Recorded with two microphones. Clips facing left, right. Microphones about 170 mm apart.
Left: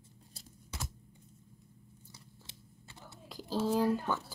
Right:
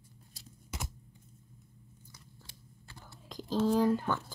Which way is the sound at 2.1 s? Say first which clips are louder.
Left 1 dB; 25° left (ahead or behind).